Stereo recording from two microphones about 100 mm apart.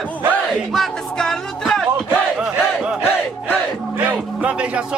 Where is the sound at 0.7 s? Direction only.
5° left (ahead or behind).